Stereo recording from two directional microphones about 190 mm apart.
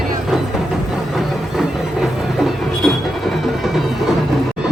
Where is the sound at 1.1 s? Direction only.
Centre (ahead or behind).